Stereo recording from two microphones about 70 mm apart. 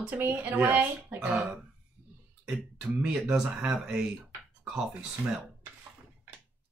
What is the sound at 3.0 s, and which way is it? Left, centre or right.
Speech, centre.